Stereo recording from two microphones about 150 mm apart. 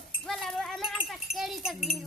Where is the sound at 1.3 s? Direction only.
Centre (ahead or behind).